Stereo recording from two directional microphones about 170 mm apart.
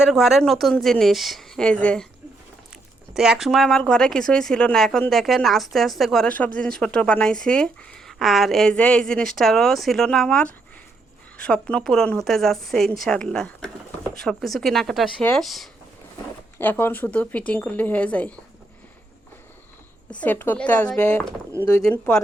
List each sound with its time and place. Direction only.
0.0 s speech: centre (ahead or behind)
3.2 s speech: centre (ahead or behind)
16.6 s speech: 10° left (ahead or behind)
20.1 s speech: 10° left (ahead or behind)